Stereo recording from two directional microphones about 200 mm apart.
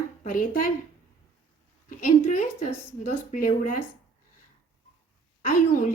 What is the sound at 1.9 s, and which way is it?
Speech, 40° left (ahead or behind).